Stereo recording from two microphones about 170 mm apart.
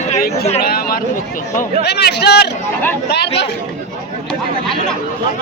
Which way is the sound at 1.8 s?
75° left (ahead or behind).